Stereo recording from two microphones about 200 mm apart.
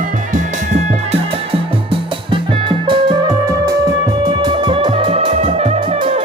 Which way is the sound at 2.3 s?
25° right (ahead or behind).